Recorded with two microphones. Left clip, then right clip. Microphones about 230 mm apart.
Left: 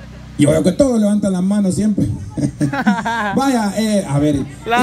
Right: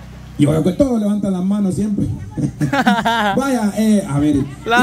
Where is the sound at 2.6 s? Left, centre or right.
Centre.